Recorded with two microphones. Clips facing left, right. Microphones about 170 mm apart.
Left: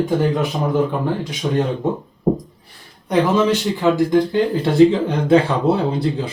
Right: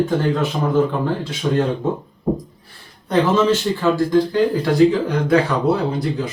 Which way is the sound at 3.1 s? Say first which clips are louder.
Even; 15° left (ahead or behind).